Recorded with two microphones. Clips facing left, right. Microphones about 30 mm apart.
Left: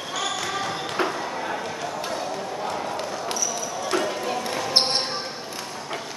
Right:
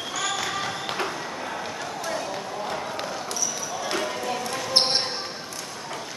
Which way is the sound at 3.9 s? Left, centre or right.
Centre.